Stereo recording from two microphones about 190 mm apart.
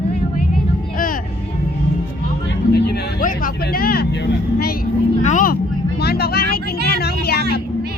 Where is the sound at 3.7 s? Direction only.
50° left (ahead or behind).